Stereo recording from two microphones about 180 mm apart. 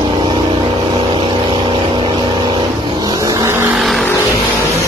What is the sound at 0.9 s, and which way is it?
Vehicle, 30° right (ahead or behind).